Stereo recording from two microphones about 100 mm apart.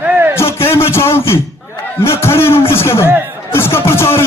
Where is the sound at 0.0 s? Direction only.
20° right (ahead or behind).